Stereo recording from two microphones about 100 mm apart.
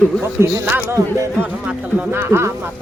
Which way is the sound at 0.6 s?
20° right (ahead or behind).